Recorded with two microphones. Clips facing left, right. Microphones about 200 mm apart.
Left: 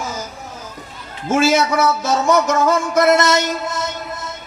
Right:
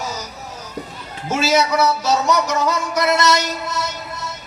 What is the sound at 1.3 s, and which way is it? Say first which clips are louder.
A man's voice: left 2 dB; 50° left (ahead or behind).